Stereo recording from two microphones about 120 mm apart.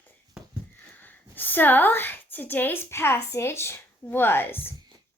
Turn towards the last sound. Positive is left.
turn(degrees=20)  # may be behind; listen again after turning